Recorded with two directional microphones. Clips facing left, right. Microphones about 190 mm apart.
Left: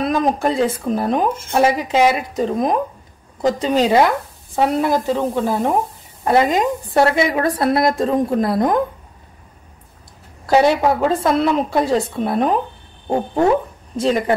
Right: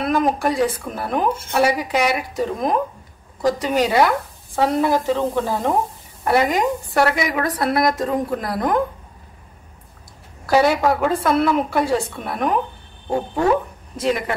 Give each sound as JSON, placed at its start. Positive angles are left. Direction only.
{"t": 0.1, "sound": "speech", "side_deg": 20}
{"t": 10.4, "sound": "speech", "side_deg": 20}
{"t": 13.9, "sound": "speech", "side_deg": 30}